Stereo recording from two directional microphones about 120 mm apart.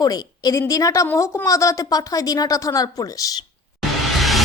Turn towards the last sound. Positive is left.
turn(degrees=0)  # may be behind; listen again after turning